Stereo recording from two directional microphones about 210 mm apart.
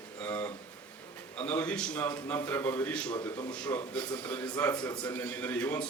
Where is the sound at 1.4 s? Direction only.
5° left (ahead or behind).